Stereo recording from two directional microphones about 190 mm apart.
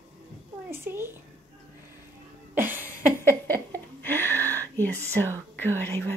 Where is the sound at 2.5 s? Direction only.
10° right (ahead or behind).